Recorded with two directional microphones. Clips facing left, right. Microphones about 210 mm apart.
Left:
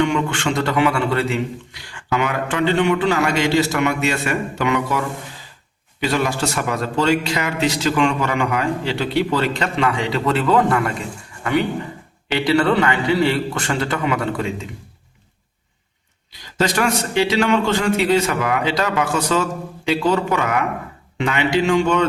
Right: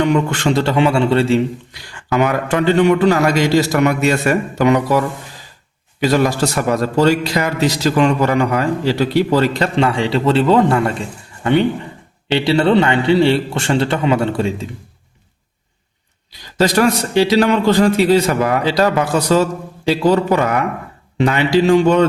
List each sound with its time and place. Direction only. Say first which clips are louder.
0.0 s a man's voice: right 4 dB; 40° right (ahead or behind)
1.9 s a man's voice: right 5 dB; 40° right (ahead or behind)
12.3 s a man's voice: right 4 dB; 25° right (ahead or behind)
16.6 s a man's voice: right 5 dB; 35° right (ahead or behind)